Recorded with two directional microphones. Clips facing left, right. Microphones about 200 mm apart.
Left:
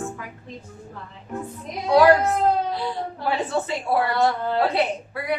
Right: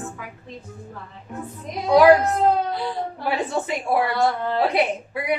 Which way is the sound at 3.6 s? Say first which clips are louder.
Right 1 dB; 15° right (ahead or behind).